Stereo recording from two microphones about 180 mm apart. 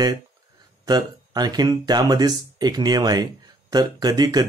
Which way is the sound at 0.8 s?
25° right (ahead or behind).